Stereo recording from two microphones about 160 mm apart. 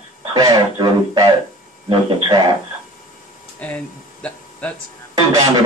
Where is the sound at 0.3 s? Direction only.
25° right (ahead or behind).